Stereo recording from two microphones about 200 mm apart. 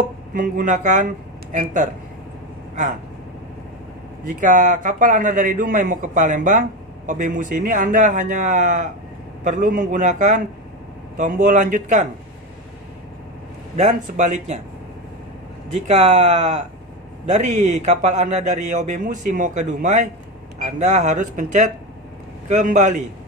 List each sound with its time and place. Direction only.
0.3 s a man's voice: 40° right (ahead or behind)
4.3 s a man's voice: 40° right (ahead or behind)
13.7 s a man's voice: 40° right (ahead or behind)
15.9 s a man's voice: 30° right (ahead or behind)